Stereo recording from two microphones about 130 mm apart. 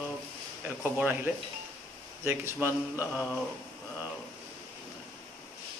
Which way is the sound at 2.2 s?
15° right (ahead or behind).